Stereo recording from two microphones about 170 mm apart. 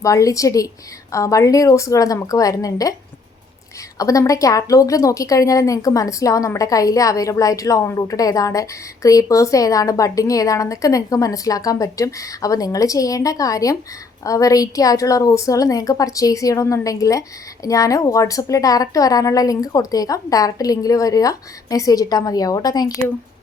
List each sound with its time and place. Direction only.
0.0 s a woman's voice: 20° left (ahead or behind)
3.9 s a woman's voice: 20° left (ahead or behind)